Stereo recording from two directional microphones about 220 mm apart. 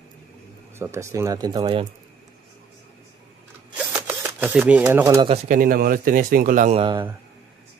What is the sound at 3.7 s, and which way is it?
Camera, 10° right (ahead or behind).